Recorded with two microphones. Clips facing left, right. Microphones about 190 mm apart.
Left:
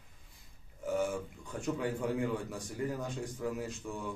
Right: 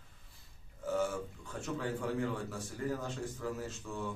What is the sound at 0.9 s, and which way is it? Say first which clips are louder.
A man's voice: left 1 dB; 15° left (ahead or behind).